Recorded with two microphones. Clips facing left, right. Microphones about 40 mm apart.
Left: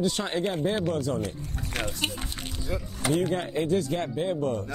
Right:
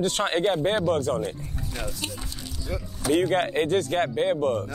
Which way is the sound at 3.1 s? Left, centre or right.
Right.